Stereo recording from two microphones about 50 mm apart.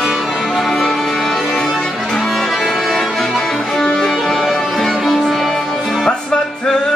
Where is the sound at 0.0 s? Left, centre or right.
Centre.